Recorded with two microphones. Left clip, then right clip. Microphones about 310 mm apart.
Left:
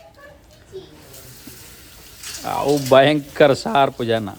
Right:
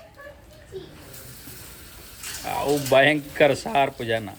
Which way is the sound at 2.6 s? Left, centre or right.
Left.